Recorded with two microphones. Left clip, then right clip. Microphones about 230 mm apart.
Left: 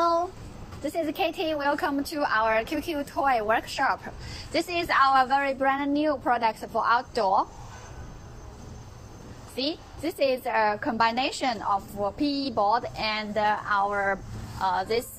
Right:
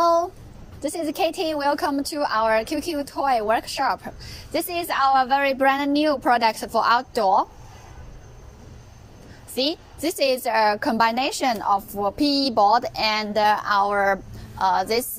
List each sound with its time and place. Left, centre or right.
0.8 s a woman's voice: right
5.6 s speech: right
9.7 s speech: right